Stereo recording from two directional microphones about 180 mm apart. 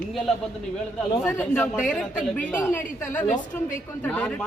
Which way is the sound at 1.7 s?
Centre (ahead or behind).